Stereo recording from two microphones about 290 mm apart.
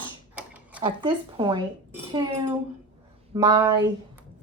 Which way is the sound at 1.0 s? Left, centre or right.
Centre.